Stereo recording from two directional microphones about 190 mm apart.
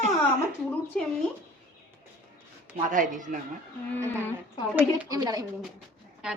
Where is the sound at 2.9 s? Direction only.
45° right (ahead or behind).